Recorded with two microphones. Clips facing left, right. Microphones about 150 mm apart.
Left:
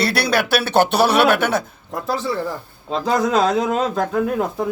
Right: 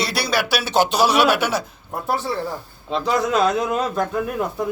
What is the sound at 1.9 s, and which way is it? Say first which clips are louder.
Speech: even; 90° left.